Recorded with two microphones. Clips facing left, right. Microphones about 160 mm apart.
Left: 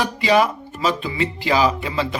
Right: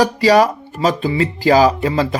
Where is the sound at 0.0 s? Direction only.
40° right (ahead or behind).